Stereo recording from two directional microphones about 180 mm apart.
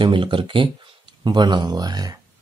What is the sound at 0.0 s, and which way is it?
Speech, 25° right (ahead or behind).